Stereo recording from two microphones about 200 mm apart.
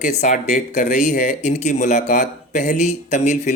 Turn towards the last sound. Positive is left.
turn(degrees=35)  # may be behind; listen again after turning